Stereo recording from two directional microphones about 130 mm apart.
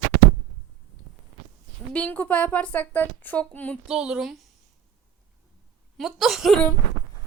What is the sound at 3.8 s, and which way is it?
Speech, 5° right (ahead or behind).